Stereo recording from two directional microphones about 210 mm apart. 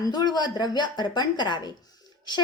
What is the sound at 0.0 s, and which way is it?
A woman's voice, 20° left (ahead or behind).